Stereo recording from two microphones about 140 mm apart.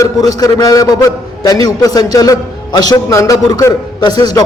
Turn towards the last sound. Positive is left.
turn(degrees=30)  # may be behind; listen again after turning